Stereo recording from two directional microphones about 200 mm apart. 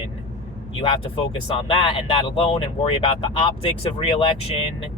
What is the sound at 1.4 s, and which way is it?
Speech, 25° left (ahead or behind).